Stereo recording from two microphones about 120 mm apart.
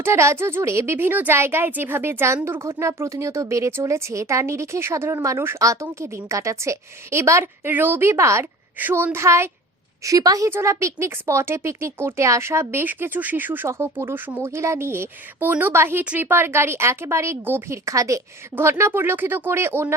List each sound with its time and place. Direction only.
0.0 s a woman's voice: 25° right (ahead or behind)